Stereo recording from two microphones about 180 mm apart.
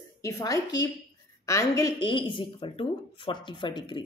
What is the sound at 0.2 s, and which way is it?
A woman's voice, 20° left (ahead or behind).